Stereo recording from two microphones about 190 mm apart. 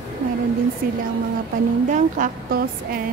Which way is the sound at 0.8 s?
55° right (ahead or behind).